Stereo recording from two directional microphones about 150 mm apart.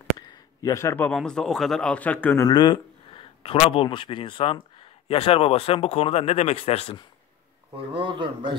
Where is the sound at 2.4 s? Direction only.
30° left (ahead or behind).